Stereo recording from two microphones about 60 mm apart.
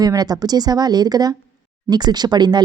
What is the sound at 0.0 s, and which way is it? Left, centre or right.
Speech, right.